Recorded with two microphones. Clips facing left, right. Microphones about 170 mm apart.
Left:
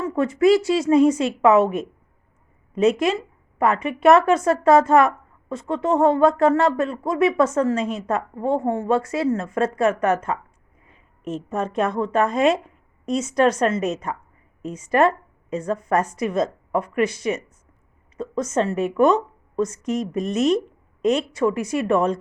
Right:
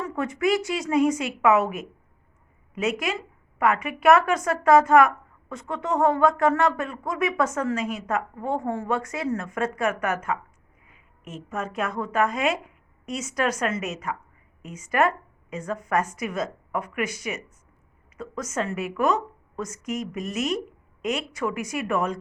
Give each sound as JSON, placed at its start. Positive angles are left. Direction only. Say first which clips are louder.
{"t": 0.0, "sound": "speech", "louder": "left 7 dB", "side_deg": 25}
{"t": 3.6, "sound": "speech", "louder": "left 4 dB", "side_deg": 30}
{"t": 10.8, "sound": "a sound", "louder": "left 12 dB", "side_deg": 35}
{"t": 11.4, "sound": "a woman's voice", "louder": "left 6 dB", "side_deg": 30}
{"t": 20.4, "sound": "a woman's voice", "louder": "left 8 dB", "side_deg": -10}
{"t": 21.6, "sound": "speech", "louder": "left 6 dB", "side_deg": 30}